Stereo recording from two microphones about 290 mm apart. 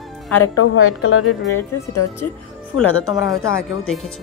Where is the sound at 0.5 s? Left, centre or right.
Left.